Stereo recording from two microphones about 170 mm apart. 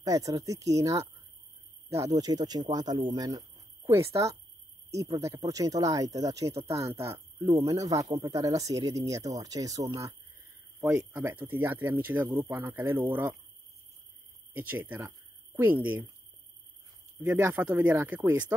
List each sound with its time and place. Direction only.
0.0 s speech: 20° right (ahead or behind)
14.5 s speech: 10° right (ahead or behind)
17.3 s speech: 10° right (ahead or behind)